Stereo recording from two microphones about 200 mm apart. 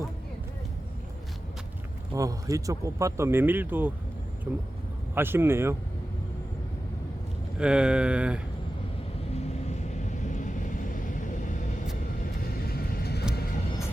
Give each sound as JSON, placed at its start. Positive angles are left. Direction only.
{"t": 2.1, "sound": "a man's voice", "side_deg": -15}
{"t": 7.6, "sound": "speech", "side_deg": -5}
{"t": 9.3, "sound": "vehicle", "side_deg": 35}
{"t": 12.6, "sound": "vehicle", "side_deg": 50}